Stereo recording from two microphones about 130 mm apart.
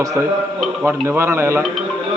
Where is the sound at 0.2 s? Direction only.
20° right (ahead or behind).